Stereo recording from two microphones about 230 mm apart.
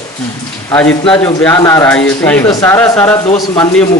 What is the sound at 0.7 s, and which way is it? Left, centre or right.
Speech, centre.